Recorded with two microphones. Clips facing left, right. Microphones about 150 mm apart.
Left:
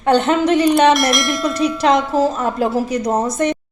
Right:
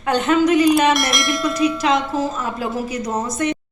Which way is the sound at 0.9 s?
Centre (ahead or behind).